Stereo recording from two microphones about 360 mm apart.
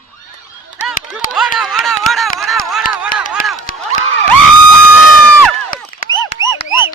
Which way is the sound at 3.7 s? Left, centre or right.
Left.